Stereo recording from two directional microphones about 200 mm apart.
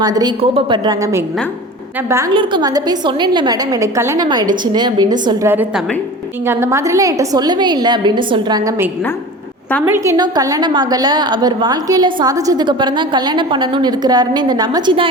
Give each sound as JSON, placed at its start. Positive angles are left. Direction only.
{"t": 0.0, "sound": "a woman's voice", "side_deg": -20}
{"t": 2.3, "sound": "a woman's voice", "side_deg": -25}
{"t": 5.5, "sound": "a woman's voice", "side_deg": -10}